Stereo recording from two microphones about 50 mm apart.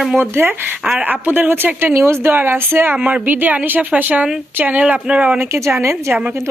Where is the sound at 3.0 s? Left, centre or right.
Right.